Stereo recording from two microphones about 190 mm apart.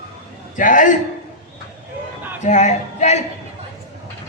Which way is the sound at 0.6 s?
45° left (ahead or behind).